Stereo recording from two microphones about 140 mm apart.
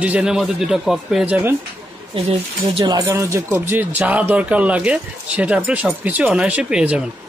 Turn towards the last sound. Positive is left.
turn(degrees=-5)  # may be behind; listen again after turning